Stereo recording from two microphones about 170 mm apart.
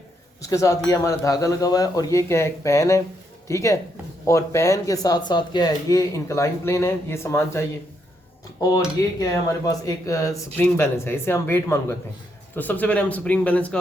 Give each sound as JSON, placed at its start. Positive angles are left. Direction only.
{"t": 0.4, "sound": "speech", "side_deg": 20}
{"t": 8.6, "sound": "speech", "side_deg": 20}